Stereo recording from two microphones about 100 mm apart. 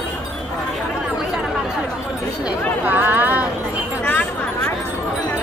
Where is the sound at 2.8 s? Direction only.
20° right (ahead or behind).